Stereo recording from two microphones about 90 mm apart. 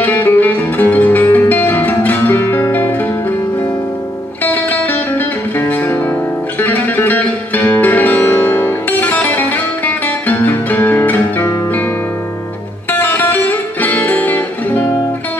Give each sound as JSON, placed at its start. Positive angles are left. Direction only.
{"t": 0.0, "sound": "music", "side_deg": 20}
{"t": 5.6, "sound": "music", "side_deg": 25}
{"t": 13.0, "sound": "music", "side_deg": 20}